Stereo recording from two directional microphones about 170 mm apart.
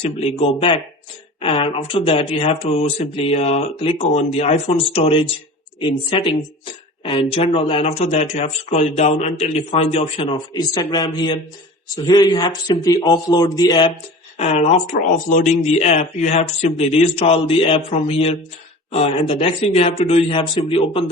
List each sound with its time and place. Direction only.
0.0 s a man's voice: 35° left (ahead or behind)
14.3 s speech: 40° left (ahead or behind)